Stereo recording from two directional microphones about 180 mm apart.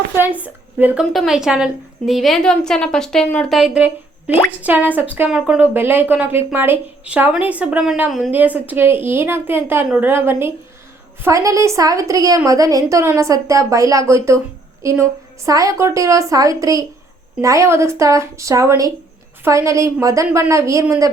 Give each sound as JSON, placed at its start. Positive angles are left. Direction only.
{"t": 0.4, "sound": "a woman's voice", "side_deg": -10}
{"t": 15.4, "sound": "speech", "side_deg": -20}